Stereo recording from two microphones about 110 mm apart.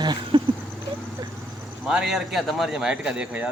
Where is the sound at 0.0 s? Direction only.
45° right (ahead or behind).